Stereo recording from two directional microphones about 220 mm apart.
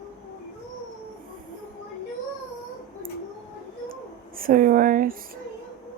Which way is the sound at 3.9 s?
40° right (ahead or behind).